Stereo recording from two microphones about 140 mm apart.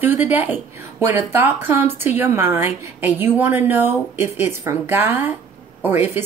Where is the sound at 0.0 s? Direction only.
15° right (ahead or behind).